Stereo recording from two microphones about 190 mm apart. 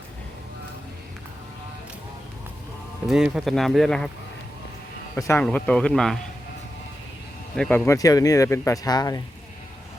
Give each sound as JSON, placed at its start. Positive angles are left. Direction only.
{"t": 3.1, "sound": "speech", "side_deg": -5}
{"t": 5.1, "sound": "speech", "side_deg": 15}
{"t": 7.5, "sound": "speech", "side_deg": 5}
{"t": 7.9, "sound": "speech", "side_deg": 20}